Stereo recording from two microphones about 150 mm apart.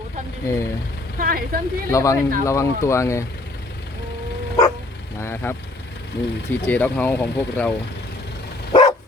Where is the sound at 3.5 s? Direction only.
90° left.